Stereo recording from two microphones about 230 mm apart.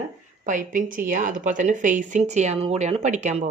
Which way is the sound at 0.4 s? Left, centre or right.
Right.